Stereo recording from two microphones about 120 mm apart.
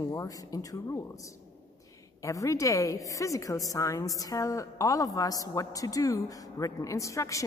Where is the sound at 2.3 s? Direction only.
25° left (ahead or behind).